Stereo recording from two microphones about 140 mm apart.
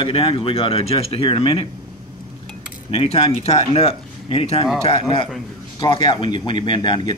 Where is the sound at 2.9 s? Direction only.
45° left (ahead or behind).